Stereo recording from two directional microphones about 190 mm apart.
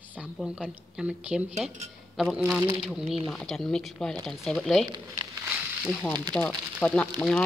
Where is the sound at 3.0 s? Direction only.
30° right (ahead or behind).